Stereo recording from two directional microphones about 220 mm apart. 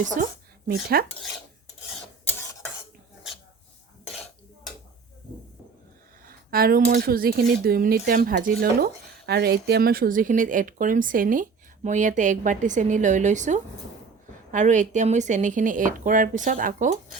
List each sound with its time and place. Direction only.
0.0 s speech: 35° right (ahead or behind)
0.7 s cutlery: 45° right (ahead or behind)
4.1 s dishes: centre (ahead or behind)
6.2 s speech: 40° right (ahead or behind)